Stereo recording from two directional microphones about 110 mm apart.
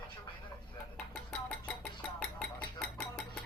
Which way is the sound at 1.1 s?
5° left (ahead or behind).